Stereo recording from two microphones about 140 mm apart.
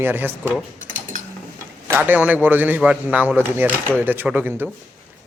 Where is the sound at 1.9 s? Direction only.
15° right (ahead or behind).